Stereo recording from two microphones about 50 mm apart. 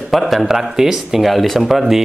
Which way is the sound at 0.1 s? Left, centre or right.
Centre.